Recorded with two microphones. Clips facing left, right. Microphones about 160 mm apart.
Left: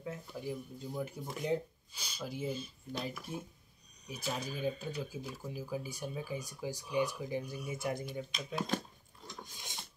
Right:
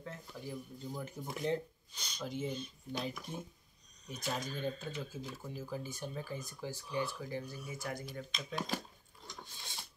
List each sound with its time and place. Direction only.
0.0 s speech: 10° left (ahead or behind)
8.0 s speech: 5° left (ahead or behind)
9.4 s a sound: 15° left (ahead or behind)